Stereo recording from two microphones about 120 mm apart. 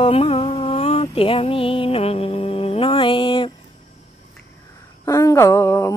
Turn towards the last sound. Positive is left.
turn(degrees=25)  # may be behind; listen again after turning